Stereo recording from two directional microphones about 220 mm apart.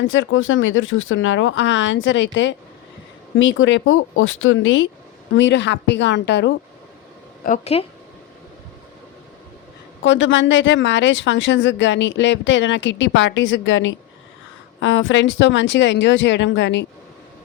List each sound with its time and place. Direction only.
0.1 s a woman's voice: 65° left (ahead or behind)
7.4 s speech: 30° left (ahead or behind)
10.0 s speech: 55° left (ahead or behind)